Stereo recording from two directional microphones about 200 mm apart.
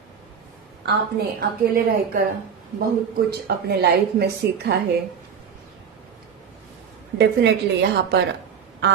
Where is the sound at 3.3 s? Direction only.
50° right (ahead or behind).